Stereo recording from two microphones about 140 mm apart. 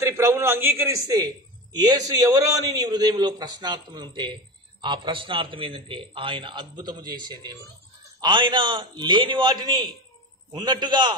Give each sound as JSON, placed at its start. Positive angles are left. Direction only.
{"t": 0.1, "sound": "a man's voice", "side_deg": -20}